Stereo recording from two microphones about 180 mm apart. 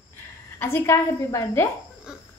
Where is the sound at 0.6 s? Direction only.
10° left (ahead or behind).